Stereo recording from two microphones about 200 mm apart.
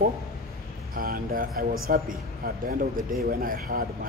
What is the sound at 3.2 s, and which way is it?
Speech, 45° right (ahead or behind).